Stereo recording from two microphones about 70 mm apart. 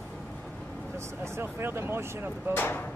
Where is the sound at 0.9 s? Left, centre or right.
Right.